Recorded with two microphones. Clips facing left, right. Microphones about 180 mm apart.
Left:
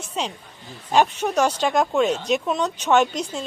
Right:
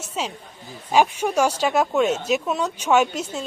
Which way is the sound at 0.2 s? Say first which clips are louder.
Even; 5° right (ahead or behind).